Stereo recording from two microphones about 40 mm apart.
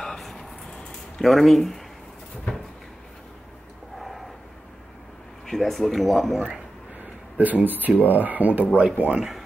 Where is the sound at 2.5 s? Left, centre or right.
Left.